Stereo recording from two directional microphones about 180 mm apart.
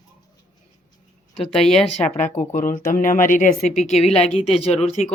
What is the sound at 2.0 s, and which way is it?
Speech, 40° left (ahead or behind).